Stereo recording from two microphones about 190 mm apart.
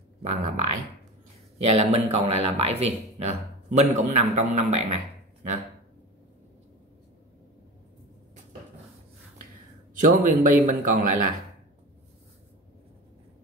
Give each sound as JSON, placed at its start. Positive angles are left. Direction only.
{"t": 0.2, "sound": "speech", "side_deg": -35}
{"t": 9.9, "sound": "a man's voice", "side_deg": -45}